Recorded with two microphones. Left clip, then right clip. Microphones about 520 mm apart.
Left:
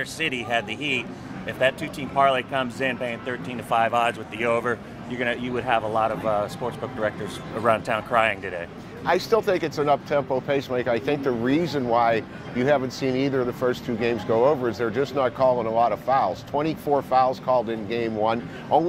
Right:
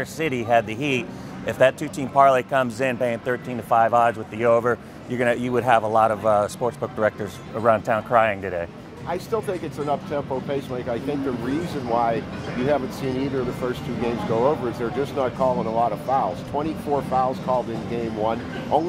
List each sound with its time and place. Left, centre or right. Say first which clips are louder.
0.0 s speech: right 1 dB; right
9.0 s speech: left 5 dB; left